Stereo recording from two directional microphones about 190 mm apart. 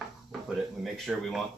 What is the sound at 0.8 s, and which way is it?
Speech, centre (ahead or behind).